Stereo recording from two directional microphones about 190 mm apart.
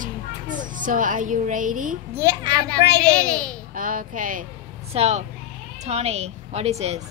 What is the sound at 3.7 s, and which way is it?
Speech, 45° right (ahead or behind).